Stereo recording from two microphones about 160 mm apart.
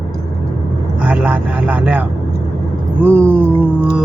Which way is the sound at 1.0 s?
10° right (ahead or behind).